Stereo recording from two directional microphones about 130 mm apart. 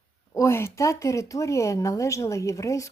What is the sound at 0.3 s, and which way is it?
Speech, 20° left (ahead or behind).